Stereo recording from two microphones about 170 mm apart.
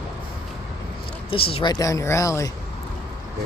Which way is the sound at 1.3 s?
35° left (ahead or behind).